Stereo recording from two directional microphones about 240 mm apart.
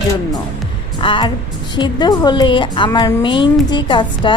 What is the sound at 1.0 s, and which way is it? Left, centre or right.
A woman's voice, centre.